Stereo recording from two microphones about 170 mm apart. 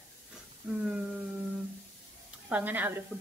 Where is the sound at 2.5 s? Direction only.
10° right (ahead or behind).